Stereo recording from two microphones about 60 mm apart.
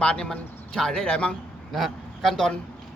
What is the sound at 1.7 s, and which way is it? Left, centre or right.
Speech, centre.